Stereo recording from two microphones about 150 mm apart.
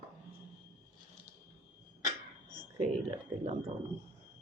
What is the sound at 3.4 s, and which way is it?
Speech, 45° right (ahead or behind).